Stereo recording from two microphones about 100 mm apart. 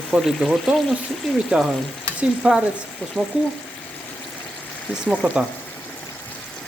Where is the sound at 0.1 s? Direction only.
Centre (ahead or behind).